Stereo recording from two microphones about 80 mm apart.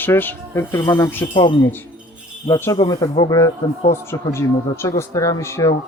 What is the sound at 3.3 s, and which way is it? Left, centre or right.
Speech, left.